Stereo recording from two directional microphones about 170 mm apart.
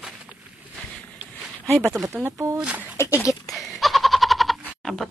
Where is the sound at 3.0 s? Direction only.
15° left (ahead or behind).